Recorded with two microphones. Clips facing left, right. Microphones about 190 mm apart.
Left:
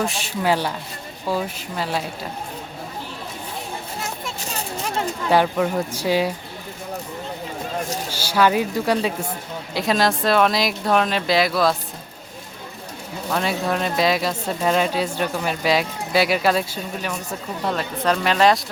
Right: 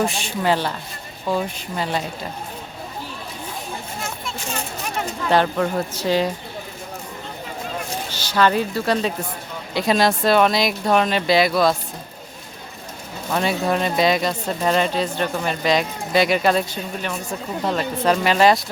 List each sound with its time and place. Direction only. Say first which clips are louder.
0.0 s speech: right 1 dB; centre (ahead or behind)
4.4 s a sound: left 1 dB; 35° left (ahead or behind)
5.3 s a woman's voice: even; 10° left (ahead or behind)
8.1 s a woman's voice: even; 10° left (ahead or behind)
9.7 s speech: right 2 dB; centre (ahead or behind)
13.3 s speech: right 2 dB; centre (ahead or behind)